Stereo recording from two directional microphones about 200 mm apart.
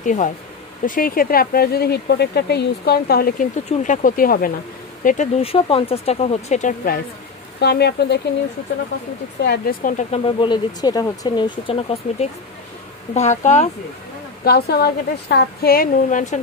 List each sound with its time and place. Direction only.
0.0 s speech: 40° left (ahead or behind)
3.6 s speech: 35° left (ahead or behind)
7.6 s speech: 55° left (ahead or behind)
9.4 s speech: 50° left (ahead or behind)
10.2 s speech: 25° left (ahead or behind)
14.4 s speech: 50° left (ahead or behind)